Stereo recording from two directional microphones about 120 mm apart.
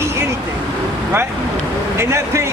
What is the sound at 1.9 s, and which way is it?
Speech, 25° right (ahead or behind).